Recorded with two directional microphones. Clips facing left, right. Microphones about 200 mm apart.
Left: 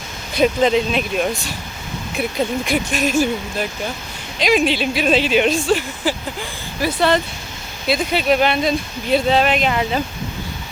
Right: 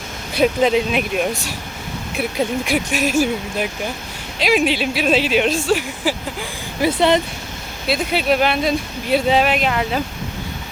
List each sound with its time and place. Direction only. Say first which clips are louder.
0.3 s speech: even; 5° right (ahead or behind)
6.8 s speech: right 2 dB; 20° right (ahead or behind)
7.9 s speech: left 1 dB; centre (ahead or behind)